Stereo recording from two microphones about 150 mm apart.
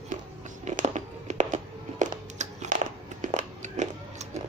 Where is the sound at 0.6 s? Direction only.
50° right (ahead or behind).